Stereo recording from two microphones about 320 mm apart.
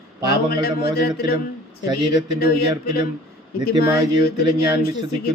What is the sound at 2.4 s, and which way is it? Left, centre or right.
Speech, left.